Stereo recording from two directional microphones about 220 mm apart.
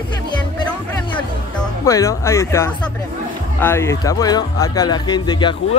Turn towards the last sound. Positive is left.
turn(degrees=20)  # may be behind; listen again after turning